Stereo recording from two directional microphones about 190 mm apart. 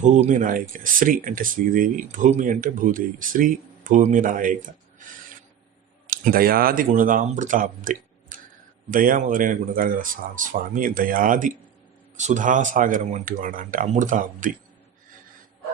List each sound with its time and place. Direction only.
0.0 s speech: 40° right (ahead or behind)
6.1 s speech: 50° right (ahead or behind)